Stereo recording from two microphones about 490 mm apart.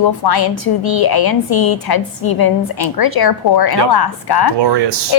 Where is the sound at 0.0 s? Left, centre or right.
Left.